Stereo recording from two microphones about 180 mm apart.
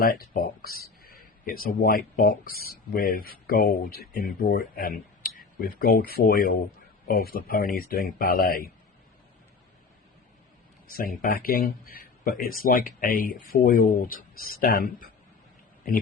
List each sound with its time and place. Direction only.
0.0 s speech: 55° left (ahead or behind)
10.8 s speech: 55° left (ahead or behind)